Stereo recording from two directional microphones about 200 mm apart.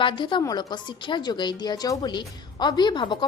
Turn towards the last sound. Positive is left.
turn(degrees=20)  # may be behind; listen again after turning